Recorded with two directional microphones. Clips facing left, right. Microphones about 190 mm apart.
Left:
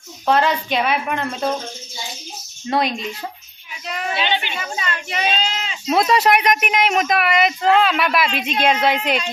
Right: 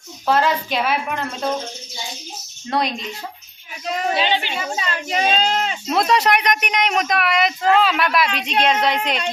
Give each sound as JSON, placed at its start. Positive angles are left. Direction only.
{"t": 0.3, "sound": "speech", "side_deg": 0}
{"t": 2.6, "sound": "speech", "side_deg": 0}
{"t": 3.9, "sound": "a child's voice", "side_deg": -35}
{"t": 5.9, "sound": "speech", "side_deg": 0}